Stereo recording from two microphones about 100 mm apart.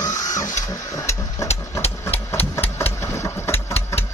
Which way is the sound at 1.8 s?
85° left.